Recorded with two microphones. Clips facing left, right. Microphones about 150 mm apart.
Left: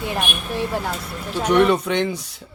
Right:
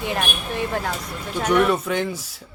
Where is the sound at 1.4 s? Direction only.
10° left (ahead or behind).